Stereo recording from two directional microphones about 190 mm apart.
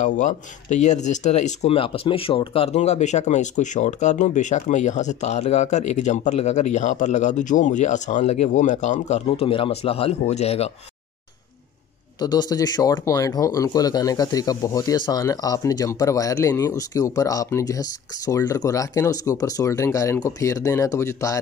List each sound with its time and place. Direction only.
0.0 s speech: 40° left (ahead or behind)
12.2 s speech: 20° left (ahead or behind)